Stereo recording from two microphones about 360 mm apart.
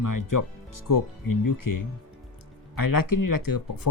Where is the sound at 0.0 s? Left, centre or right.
Left.